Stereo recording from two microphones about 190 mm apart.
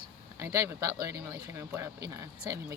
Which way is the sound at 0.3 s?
15° right (ahead or behind).